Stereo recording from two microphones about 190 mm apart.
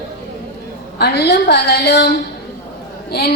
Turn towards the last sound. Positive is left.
turn(degrees=55)  # may be behind; listen again after turning